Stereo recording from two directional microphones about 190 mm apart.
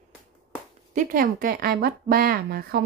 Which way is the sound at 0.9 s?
45° right (ahead or behind).